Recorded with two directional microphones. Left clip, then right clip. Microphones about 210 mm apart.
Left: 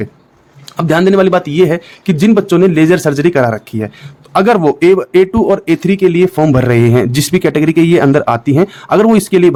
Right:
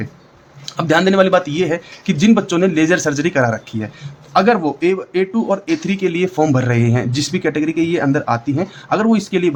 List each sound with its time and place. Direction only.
0.6 s speech: 35° left (ahead or behind)